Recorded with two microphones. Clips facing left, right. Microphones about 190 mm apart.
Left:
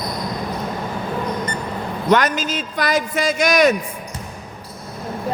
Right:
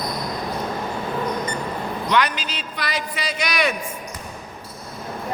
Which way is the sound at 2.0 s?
45° left (ahead or behind).